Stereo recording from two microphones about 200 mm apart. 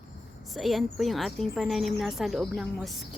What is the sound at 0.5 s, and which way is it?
A woman's voice, centre (ahead or behind).